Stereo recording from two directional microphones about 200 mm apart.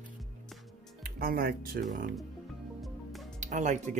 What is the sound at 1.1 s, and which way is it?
Speech, 45° right (ahead or behind).